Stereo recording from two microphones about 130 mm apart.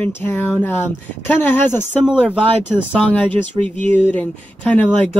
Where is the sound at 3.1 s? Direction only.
10° left (ahead or behind).